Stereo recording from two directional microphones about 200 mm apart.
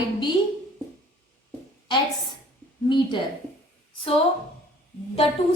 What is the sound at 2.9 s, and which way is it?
Speech, 25° left (ahead or behind).